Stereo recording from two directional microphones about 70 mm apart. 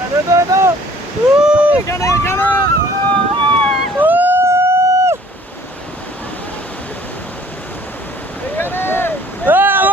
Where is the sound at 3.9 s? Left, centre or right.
Right.